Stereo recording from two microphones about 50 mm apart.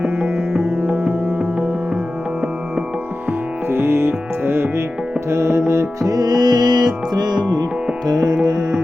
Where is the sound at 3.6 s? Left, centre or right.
Right.